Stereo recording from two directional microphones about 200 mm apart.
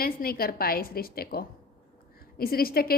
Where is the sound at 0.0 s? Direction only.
50° left (ahead or behind).